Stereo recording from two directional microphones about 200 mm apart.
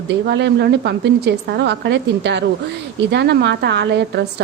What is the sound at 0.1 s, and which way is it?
A woman's voice, 60° right (ahead or behind).